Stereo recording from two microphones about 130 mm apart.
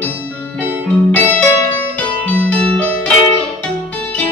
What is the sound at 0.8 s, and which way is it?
Music, 10° left (ahead or behind).